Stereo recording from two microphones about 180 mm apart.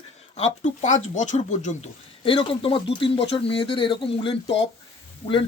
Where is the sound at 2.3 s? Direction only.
30° left (ahead or behind).